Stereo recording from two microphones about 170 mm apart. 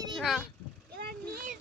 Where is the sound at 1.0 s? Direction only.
65° right (ahead or behind).